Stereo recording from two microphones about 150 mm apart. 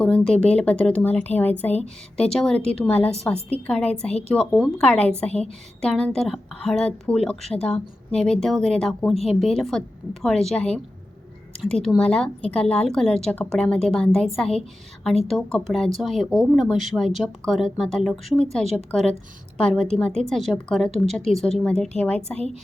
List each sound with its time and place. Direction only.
0.0 s a woman's voice: 5° left (ahead or behind)
9.1 s a woman's voice: 40° left (ahead or behind)
9.4 s a woman's voice: centre (ahead or behind)